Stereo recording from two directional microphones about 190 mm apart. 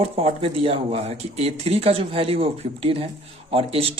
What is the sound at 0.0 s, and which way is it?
Speech, 30° right (ahead or behind).